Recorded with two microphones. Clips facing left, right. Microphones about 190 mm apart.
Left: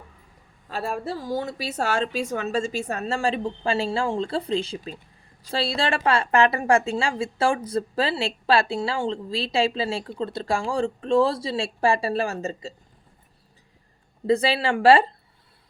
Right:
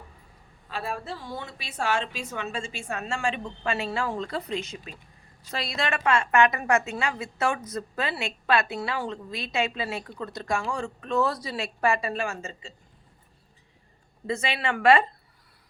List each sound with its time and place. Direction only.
0.7 s a woman's voice: 45° left (ahead or behind)
14.3 s a woman's voice: 35° left (ahead or behind)